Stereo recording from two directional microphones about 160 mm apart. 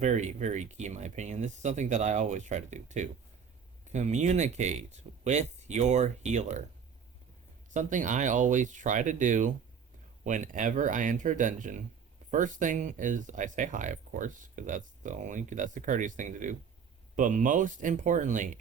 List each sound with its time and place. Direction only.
0.0 s speech: 45° right (ahead or behind)
7.7 s speech: 50° right (ahead or behind)